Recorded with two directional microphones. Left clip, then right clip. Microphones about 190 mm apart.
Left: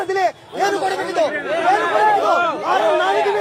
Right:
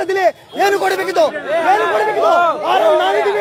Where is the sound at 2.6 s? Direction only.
60° right (ahead or behind).